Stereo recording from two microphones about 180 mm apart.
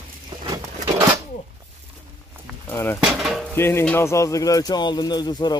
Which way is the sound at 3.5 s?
15° left (ahead or behind).